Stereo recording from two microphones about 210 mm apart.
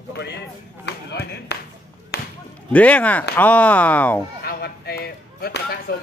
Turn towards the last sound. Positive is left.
turn(degrees=50)  # may be behind; listen again after turning